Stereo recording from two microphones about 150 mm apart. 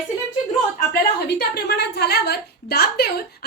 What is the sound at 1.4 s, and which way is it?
A woman's voice, 90° left.